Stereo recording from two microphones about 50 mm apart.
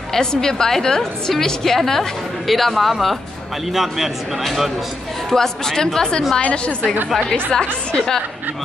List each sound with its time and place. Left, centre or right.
0.1 s a woman's voice: centre
5.3 s a woman's voice: centre